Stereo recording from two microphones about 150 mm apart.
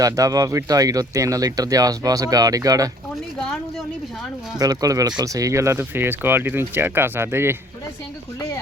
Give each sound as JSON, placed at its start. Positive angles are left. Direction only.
{"t": 0.0, "sound": "speech", "side_deg": -25}
{"t": 4.5, "sound": "speech", "side_deg": -25}
{"t": 8.4, "sound": "a sound", "side_deg": 25}